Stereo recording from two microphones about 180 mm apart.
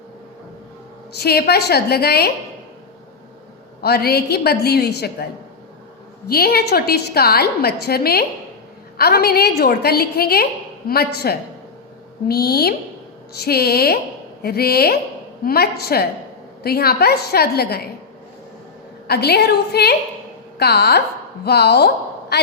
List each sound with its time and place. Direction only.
1.1 s a woman's voice: 60° left (ahead or behind)
3.8 s a woman's voice: 60° left (ahead or behind)
6.2 s a woman's voice: 60° left (ahead or behind)
19.0 s a woman's voice: 65° left (ahead or behind)